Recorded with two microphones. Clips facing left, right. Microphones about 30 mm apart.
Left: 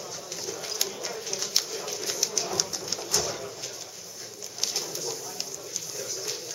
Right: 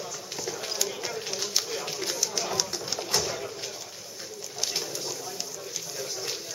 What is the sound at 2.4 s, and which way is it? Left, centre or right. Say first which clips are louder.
Pigeon: right 1 dB; centre.